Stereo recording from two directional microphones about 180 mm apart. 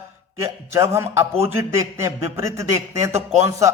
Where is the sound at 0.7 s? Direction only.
15° right (ahead or behind).